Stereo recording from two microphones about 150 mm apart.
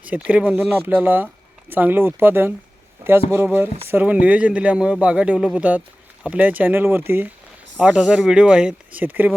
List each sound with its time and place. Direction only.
0.0 s speech: 10° right (ahead or behind)